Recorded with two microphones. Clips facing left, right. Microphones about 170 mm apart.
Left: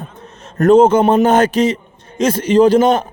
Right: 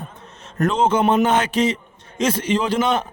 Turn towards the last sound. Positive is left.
turn(degrees=40)  # may be behind; listen again after turning